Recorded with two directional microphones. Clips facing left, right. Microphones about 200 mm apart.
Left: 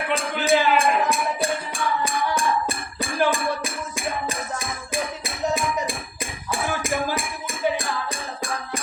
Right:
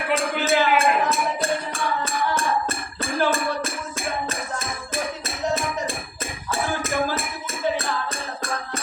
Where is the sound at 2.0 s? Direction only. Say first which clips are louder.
Left 1 dB; 15° left (ahead or behind).